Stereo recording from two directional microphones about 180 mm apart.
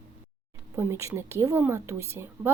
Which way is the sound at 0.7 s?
15° right (ahead or behind).